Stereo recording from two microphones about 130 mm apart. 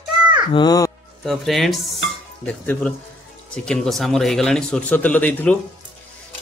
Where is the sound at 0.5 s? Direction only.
30° left (ahead or behind).